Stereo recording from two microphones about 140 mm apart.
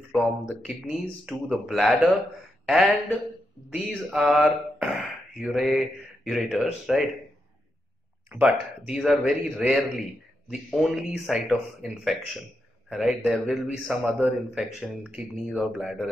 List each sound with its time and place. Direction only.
0.1 s a man's voice: centre (ahead or behind)
8.3 s a man's voice: 10° right (ahead or behind)